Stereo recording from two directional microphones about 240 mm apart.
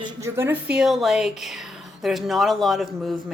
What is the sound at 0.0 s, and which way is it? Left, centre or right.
A woman's voice, centre.